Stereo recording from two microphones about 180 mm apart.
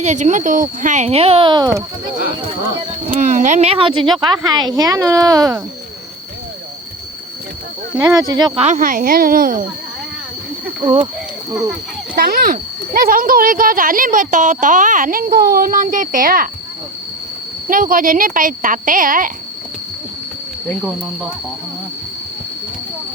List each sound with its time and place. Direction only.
0.0 s speech: 40° right (ahead or behind); by 1.8 s 25° right (ahead or behind)
3.2 s a woman's voice: 45° right (ahead or behind); by 5.5 s 20° right (ahead or behind)
7.9 s a woman's voice: 20° right (ahead or behind)
8.6 s speech: 45° right (ahead or behind)
10.8 s speech: 30° right (ahead or behind)
12.1 s speech: 55° right (ahead or behind)
17.7 s speech: 50° right (ahead or behind)
20.7 s speech: centre (ahead or behind)